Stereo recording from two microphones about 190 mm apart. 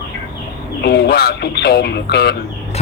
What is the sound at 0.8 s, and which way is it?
A man's voice, 60° left (ahead or behind).